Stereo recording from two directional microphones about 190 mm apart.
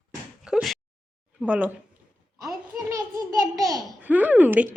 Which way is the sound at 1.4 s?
5° right (ahead or behind).